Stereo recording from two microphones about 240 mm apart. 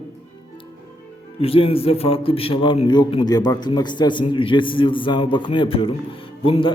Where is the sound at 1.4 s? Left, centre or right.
Left.